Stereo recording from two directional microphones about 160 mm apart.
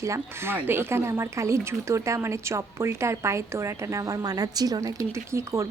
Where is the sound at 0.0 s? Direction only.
15° right (ahead or behind).